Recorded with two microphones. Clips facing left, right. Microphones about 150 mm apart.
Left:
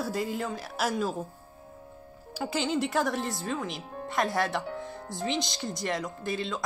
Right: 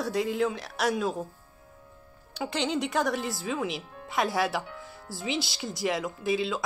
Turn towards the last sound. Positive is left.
turn(degrees=-5)  # may be behind; listen again after turning